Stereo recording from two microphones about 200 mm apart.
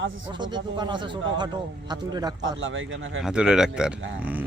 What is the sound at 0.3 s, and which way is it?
Speech, 20° right (ahead or behind).